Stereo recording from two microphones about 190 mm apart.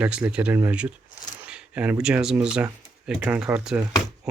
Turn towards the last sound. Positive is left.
turn(degrees=-5)  # may be behind; listen again after turning